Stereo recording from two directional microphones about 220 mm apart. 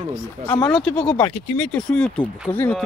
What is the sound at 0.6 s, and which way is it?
Speech, 5° left (ahead or behind).